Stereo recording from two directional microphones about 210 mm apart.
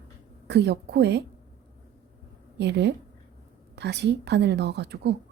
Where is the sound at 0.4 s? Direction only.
55° right (ahead or behind).